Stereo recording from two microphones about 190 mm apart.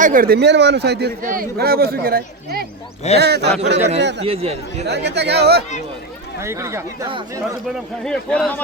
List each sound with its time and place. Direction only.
0.0 s a man's voice: 45° right (ahead or behind); by 4.2 s 65° right (ahead or behind)
4.2 s speech: 30° right (ahead or behind)
4.9 s speech: 65° right (ahead or behind)
6.4 s speech: 15° right (ahead or behind)
8.0 s speech: 5° left (ahead or behind)